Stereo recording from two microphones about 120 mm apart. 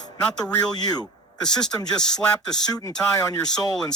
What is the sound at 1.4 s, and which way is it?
Speech, 5° left (ahead or behind).